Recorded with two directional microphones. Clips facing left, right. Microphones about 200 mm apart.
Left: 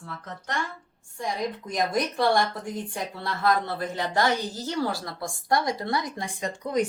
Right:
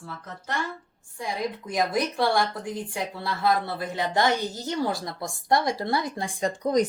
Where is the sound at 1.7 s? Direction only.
5° right (ahead or behind).